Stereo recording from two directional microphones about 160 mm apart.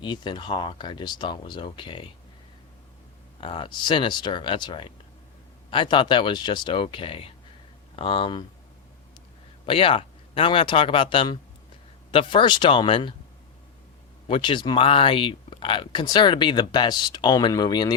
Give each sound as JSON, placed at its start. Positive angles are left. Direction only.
{"t": 0.0, "sound": "speech", "side_deg": 30}
{"t": 3.4, "sound": "speech", "side_deg": 30}
{"t": 9.6, "sound": "speech", "side_deg": 35}
{"t": 14.3, "sound": "speech", "side_deg": 30}